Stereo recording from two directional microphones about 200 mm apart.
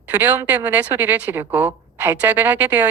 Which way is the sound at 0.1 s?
10° right (ahead or behind).